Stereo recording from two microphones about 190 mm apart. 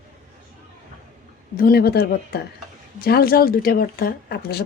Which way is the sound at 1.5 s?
50° left (ahead or behind).